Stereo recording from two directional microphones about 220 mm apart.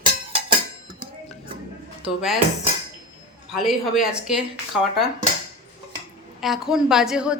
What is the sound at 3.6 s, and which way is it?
Speech, centre (ahead or behind).